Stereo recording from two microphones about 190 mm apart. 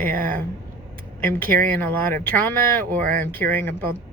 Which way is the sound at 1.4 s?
50° right (ahead or behind).